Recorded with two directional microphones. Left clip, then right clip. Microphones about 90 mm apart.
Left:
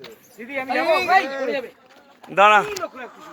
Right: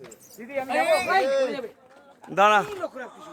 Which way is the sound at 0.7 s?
20° right (ahead or behind).